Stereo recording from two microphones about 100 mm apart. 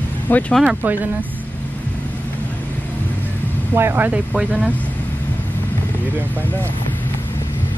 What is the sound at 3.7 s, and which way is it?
Speech, 20° right (ahead or behind).